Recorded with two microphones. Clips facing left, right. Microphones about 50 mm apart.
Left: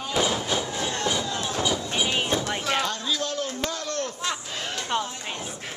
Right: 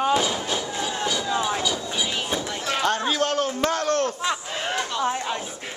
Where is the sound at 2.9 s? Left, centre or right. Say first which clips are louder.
Right 6 dB; right.